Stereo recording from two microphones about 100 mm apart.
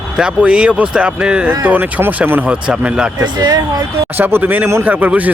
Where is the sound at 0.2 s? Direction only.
10° right (ahead or behind).